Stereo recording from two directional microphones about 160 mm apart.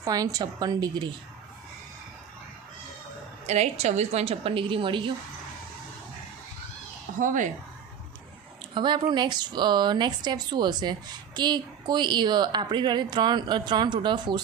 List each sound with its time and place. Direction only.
0.0 s speech: 20° right (ahead or behind)
3.4 s a woman's voice: 45° right (ahead or behind)
7.2 s speech: 55° right (ahead or behind)
8.7 s speech: 30° right (ahead or behind)